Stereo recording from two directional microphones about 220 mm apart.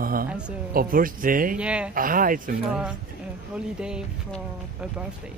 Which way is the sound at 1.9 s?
40° right (ahead or behind).